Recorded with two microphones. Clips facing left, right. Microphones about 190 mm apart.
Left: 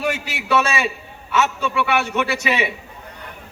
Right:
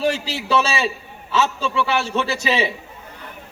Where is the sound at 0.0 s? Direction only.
25° right (ahead or behind).